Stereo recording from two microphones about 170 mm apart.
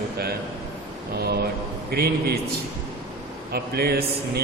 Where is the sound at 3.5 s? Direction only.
65° right (ahead or behind).